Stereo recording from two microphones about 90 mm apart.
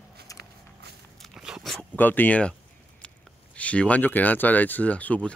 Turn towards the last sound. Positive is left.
turn(degrees=15)  # may be behind; listen again after turning